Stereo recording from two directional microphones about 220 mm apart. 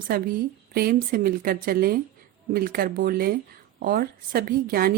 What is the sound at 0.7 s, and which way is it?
Speech, 45° right (ahead or behind).